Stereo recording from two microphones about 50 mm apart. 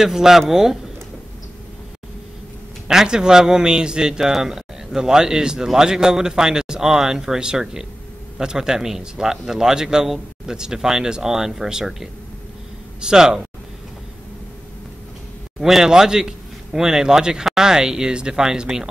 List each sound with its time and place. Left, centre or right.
0.0 s a man's voice: centre
2.9 s a man's voice: centre
15.6 s a man's voice: centre